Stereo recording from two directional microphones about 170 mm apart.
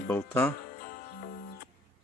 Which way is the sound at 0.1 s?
10° left (ahead or behind).